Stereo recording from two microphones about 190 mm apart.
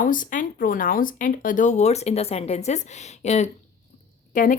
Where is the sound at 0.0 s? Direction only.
45° left (ahead or behind).